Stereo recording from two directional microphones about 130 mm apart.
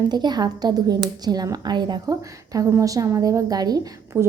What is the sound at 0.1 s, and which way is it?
A woman's voice, 35° right (ahead or behind).